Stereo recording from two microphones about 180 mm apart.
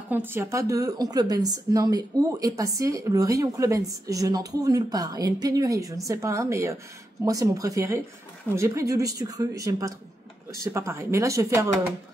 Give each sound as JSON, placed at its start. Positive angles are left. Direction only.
{"t": 0.1, "sound": "a woman's voice", "side_deg": -10}